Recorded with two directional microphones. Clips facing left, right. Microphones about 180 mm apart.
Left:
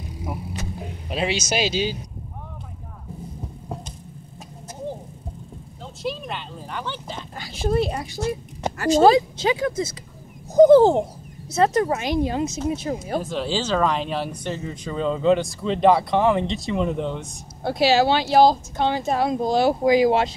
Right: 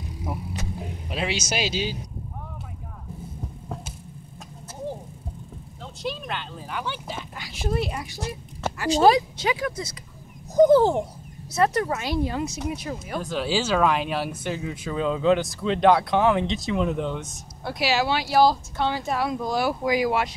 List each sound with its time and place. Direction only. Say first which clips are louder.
1.3 s speech: left 4 dB; 10° right (ahead or behind)
5.8 s a sound: left 2 dB; centre (ahead or behind)
7.3 s speech: left 6 dB; 30° left (ahead or behind)
8.7 s speech: left 5 dB; 45° left (ahead or behind)
9.0 s speech: left 2 dB; 25° left (ahead or behind)
10.6 s speech: left 4 dB; 35° left (ahead or behind)
11.5 s speech: left 3 dB; 25° left (ahead or behind)
13.2 s speech: even; centre (ahead or behind)
17.7 s speech: left 6 dB; 30° left (ahead or behind)